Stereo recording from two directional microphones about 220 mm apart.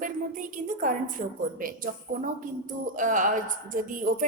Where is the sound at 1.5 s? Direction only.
40° right (ahead or behind).